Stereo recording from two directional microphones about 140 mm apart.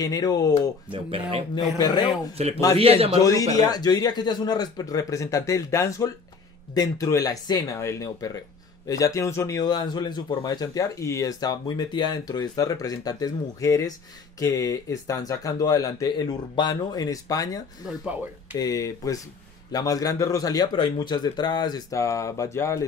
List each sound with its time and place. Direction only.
0.0 s speech: 25° left (ahead or behind)
0.9 s speech: 40° right (ahead or behind)
1.8 s speech: 30° left (ahead or behind)
2.3 s a man's voice: 45° right (ahead or behind)
3.3 s speech: 25° left (ahead or behind)
18.6 s speech: 25° left (ahead or behind)